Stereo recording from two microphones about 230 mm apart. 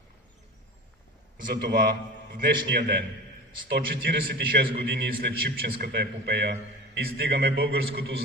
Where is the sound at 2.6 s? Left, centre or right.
Right.